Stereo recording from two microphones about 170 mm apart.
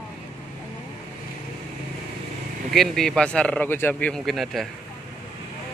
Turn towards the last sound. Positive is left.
turn(degrees=0)  # may be behind; listen again after turning